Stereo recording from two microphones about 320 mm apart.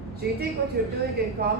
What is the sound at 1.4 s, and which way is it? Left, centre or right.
Speech, right.